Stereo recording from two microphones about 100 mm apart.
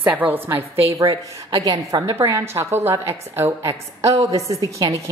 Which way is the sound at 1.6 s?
40° right (ahead or behind).